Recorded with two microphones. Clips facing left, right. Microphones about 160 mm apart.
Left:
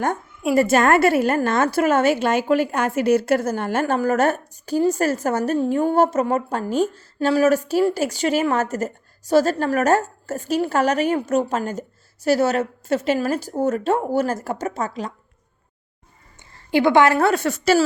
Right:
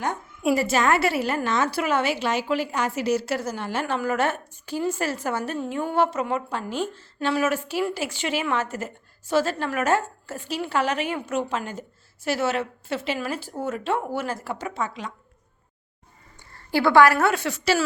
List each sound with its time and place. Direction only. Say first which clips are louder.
0.5 s a woman's voice: left 6 dB; 50° left (ahead or behind)
16.4 s a woman's voice: left 4 dB; 20° left (ahead or behind); by 17.8 s 45° left (ahead or behind)